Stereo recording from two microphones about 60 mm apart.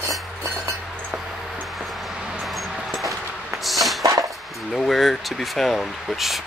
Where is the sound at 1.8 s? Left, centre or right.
Centre.